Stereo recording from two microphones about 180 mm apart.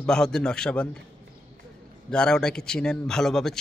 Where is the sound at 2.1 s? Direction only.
5° left (ahead or behind).